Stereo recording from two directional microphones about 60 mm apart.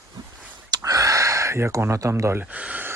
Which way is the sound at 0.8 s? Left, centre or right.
Right.